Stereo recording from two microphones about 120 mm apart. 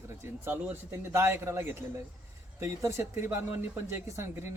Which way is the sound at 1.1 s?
20° right (ahead or behind).